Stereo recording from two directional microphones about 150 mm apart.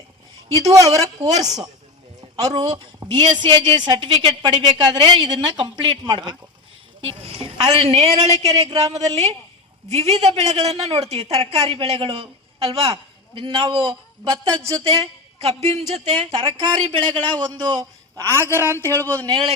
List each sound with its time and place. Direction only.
0.6 s a woman's voice: 20° right (ahead or behind)
18.8 s speech: 15° left (ahead or behind)
19.3 s a man's voice: 30° right (ahead or behind)